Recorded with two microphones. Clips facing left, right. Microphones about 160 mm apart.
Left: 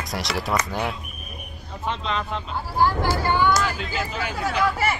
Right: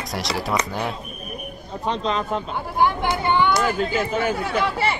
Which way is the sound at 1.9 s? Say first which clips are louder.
Right 4 dB; 40° right (ahead or behind).